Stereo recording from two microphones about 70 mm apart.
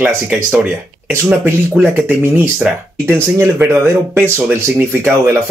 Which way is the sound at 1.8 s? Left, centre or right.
Right.